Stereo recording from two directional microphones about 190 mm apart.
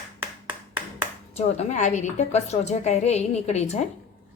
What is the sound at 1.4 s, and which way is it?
A woman's voice, 35° left (ahead or behind).